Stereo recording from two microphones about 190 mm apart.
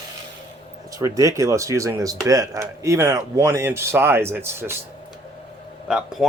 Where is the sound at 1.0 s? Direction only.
15° right (ahead or behind).